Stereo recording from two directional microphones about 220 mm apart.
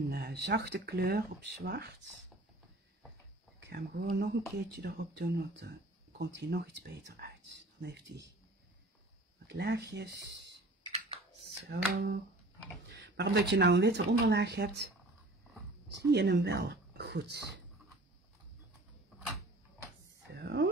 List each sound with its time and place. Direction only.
0.1 s speech: 50° right (ahead or behind)
3.5 s speech: 50° right (ahead or behind)
9.5 s speech: 50° right (ahead or behind)
11.7 s speech: 50° right (ahead or behind)
16.1 s speech: 50° right (ahead or behind)
20.3 s a sound: 50° right (ahead or behind)